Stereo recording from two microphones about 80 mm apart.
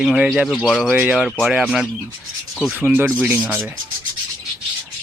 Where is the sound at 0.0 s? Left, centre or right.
Centre.